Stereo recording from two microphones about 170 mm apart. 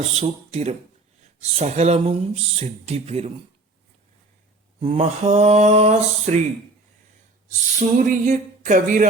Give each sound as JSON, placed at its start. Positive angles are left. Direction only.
{"t": 0.1, "sound": "speech", "side_deg": -40}
{"t": 4.8, "sound": "speech", "side_deg": -35}
{"t": 7.8, "sound": "a sound", "side_deg": -50}